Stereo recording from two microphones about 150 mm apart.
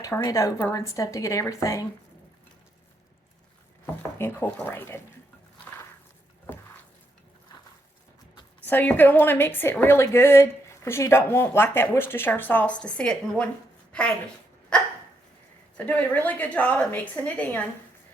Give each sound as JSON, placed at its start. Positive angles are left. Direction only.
{"t": 0.0, "sound": "speech", "side_deg": 25}
{"t": 4.5, "sound": "a woman's voice", "side_deg": 15}
{"t": 8.6, "sound": "a woman's voice", "side_deg": 10}
{"t": 14.7, "sound": "dog", "side_deg": 5}
{"t": 15.9, "sound": "a woman's voice", "side_deg": 10}